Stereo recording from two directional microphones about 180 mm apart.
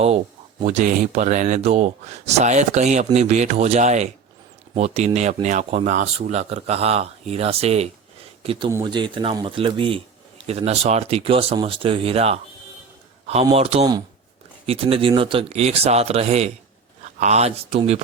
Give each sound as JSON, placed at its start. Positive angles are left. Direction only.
{"t": 0.6, "sound": "speech", "side_deg": -40}